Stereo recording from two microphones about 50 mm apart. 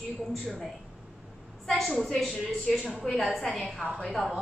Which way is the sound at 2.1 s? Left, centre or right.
Centre.